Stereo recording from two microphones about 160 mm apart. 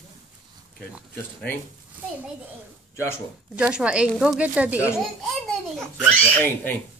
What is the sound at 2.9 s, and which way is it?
Speech, 15° left (ahead or behind).